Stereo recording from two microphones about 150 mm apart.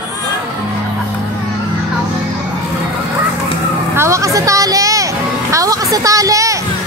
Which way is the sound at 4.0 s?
20° right (ahead or behind).